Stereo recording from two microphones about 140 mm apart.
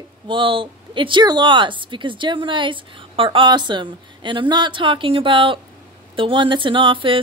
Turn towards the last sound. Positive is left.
turn(degrees=-35)  # may be behind; listen again after turning